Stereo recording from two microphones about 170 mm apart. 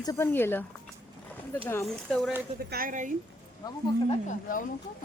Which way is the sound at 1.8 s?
5° left (ahead or behind).